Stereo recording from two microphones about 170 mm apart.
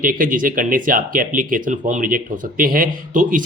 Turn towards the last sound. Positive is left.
turn(degrees=-55)  # may be behind; listen again after turning